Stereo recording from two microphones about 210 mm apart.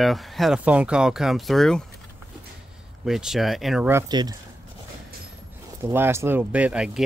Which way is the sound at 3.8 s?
15° right (ahead or behind).